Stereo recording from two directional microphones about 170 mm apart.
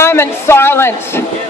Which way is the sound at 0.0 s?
15° left (ahead or behind).